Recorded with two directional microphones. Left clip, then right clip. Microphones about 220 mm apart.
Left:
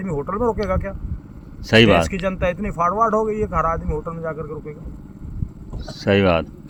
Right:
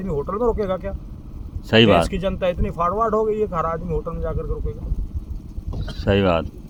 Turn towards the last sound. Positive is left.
turn(degrees=5)  # may be behind; listen again after turning